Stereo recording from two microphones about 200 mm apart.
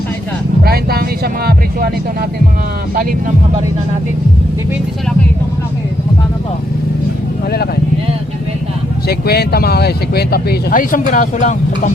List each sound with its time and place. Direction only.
0.6 s speech: 50° right (ahead or behind)
2.9 s speech: 45° right (ahead or behind)
9.0 s speech: 50° left (ahead or behind)